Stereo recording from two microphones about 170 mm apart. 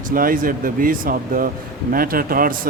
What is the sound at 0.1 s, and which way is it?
A man's voice, 55° right (ahead or behind).